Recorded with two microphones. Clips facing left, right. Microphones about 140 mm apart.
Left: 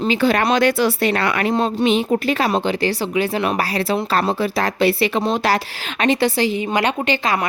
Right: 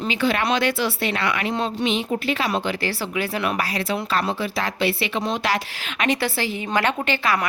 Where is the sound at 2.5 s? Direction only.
25° left (ahead or behind).